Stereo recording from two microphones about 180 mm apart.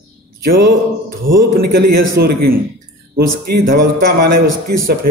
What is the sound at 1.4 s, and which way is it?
A man's voice, 60° right (ahead or behind).